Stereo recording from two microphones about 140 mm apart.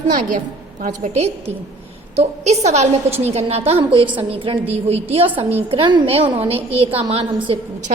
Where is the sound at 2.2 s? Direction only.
50° right (ahead or behind).